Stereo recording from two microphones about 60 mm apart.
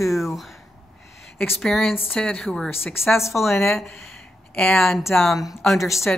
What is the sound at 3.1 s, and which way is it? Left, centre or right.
Speech, left.